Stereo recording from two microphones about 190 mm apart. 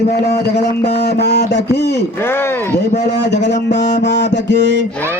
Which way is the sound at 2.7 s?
65° left (ahead or behind).